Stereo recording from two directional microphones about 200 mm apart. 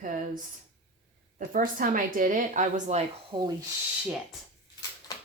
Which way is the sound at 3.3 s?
25° right (ahead or behind).